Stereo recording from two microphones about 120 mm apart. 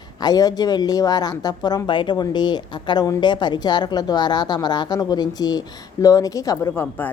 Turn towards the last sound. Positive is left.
turn(degrees=30)  # may be behind; listen again after turning